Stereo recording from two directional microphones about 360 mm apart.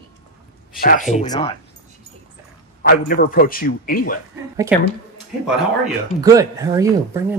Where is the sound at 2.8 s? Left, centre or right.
Left.